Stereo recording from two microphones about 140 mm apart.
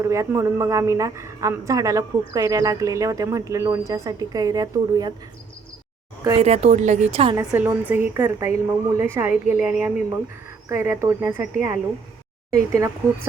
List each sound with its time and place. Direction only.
0.0 s a woman's voice: 20° right (ahead or behind)
6.4 s a woman's voice: 50° right (ahead or behind)
7.3 s a woman's voice: 10° right (ahead or behind)
10.7 s a woman's voice: 20° right (ahead or behind)